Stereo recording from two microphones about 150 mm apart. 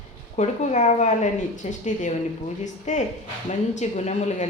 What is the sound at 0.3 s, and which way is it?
Speech, 50° left (ahead or behind).